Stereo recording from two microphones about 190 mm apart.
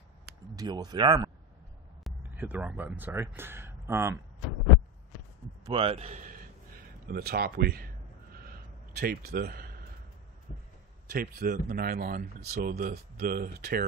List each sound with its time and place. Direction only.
0.6 s speech: 20° right (ahead or behind)
2.3 s speech: 10° right (ahead or behind)
5.7 s a man's voice: 30° right (ahead or behind)
7.1 s a sound: 55° right (ahead or behind)
11.1 s speech: 50° right (ahead or behind)